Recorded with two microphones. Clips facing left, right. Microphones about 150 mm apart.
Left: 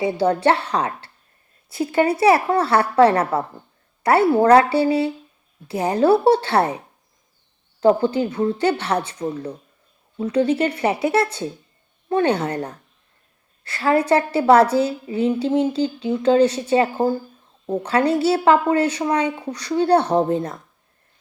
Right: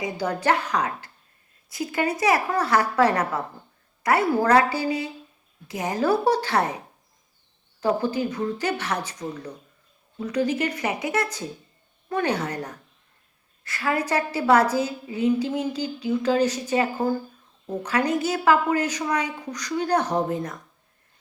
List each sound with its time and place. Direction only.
0.0 s a woman's voice: 30° left (ahead or behind)